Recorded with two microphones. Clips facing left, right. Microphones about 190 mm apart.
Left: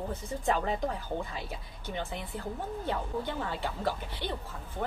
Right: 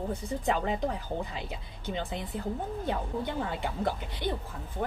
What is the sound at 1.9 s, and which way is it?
A woman's voice, 15° right (ahead or behind).